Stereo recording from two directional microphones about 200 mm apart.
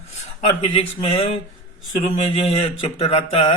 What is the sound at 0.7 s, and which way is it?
Speech, 30° left (ahead or behind).